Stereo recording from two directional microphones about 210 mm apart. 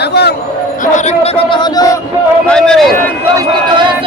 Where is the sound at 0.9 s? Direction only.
35° left (ahead or behind).